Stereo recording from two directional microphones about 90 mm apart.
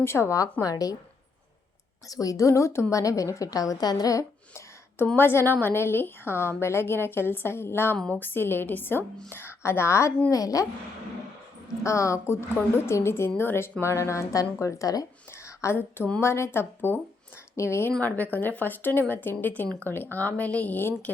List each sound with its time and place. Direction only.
0.0 s a woman's voice: 30° left (ahead or behind)
0.6 s speech: 40° left (ahead or behind)
2.0 s a woman's voice: 40° left (ahead or behind)
5.1 s a woman's voice: 25° left (ahead or behind)
11.8 s a woman's voice: 35° left (ahead or behind)
15.3 s a sound: 30° left (ahead or behind)
16.2 s speech: 30° left (ahead or behind)
18.0 s a woman's voice: 20° left (ahead or behind)